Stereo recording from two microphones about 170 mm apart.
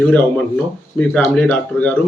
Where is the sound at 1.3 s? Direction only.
10° left (ahead or behind).